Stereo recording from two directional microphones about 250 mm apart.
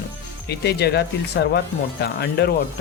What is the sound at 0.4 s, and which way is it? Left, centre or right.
Speech, left.